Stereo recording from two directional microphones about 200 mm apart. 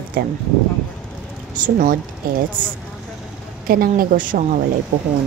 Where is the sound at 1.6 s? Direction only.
45° right (ahead or behind).